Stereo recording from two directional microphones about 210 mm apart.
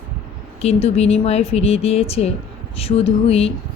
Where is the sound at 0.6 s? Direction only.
30° left (ahead or behind).